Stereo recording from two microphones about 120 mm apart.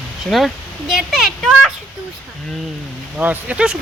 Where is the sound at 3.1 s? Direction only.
10° right (ahead or behind).